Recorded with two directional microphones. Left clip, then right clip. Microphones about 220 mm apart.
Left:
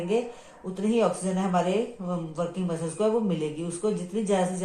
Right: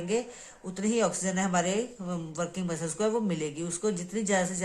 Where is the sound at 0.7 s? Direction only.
25° right (ahead or behind).